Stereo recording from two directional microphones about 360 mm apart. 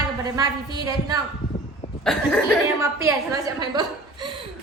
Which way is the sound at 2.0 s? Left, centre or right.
Centre.